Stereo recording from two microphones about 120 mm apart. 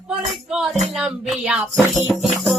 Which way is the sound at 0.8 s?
5° right (ahead or behind).